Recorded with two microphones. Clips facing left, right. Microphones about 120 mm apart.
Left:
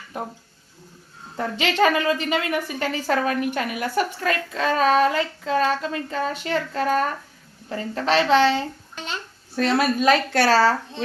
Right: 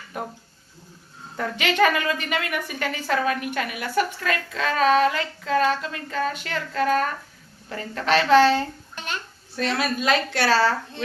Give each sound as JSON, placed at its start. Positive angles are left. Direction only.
{"t": 0.1, "sound": "speech", "side_deg": 25}
{"t": 1.4, "sound": "a woman's voice", "side_deg": 30}
{"t": 9.6, "sound": "a woman's voice", "side_deg": 45}